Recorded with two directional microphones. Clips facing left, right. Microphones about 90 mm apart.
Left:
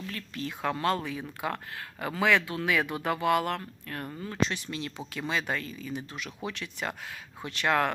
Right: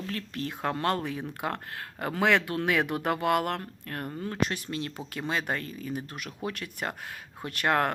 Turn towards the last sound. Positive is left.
turn(degrees=-50)  # may be behind; listen again after turning